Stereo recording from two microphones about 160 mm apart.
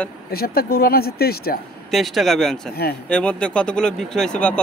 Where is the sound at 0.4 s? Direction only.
70° left (ahead or behind).